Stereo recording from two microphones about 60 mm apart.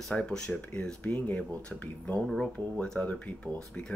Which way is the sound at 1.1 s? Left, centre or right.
Left.